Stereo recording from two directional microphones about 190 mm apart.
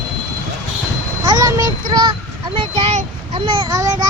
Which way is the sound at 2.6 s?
30° right (ahead or behind).